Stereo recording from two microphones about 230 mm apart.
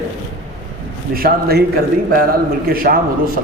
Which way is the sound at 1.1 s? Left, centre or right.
Right.